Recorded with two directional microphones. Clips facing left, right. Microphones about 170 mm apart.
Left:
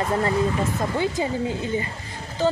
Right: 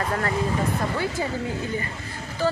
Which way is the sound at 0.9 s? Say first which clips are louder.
Left 3 dB; 20° left (ahead or behind).